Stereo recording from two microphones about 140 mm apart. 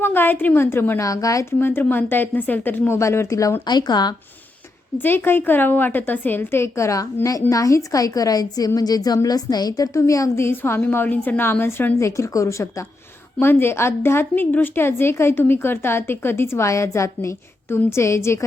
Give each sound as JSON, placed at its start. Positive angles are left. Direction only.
{"t": 0.0, "sound": "a woman's voice", "side_deg": 15}
{"t": 4.9, "sound": "a woman's voice", "side_deg": 15}